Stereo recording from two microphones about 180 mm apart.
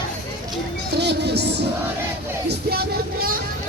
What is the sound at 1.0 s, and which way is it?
Music, 70° right (ahead or behind).